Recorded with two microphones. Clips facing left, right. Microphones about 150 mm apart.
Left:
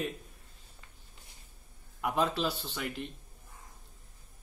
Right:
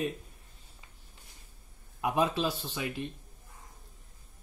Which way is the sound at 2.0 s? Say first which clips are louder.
Right 2 dB; 15° right (ahead or behind).